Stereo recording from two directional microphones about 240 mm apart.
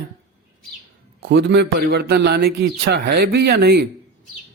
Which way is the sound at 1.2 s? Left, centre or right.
Right.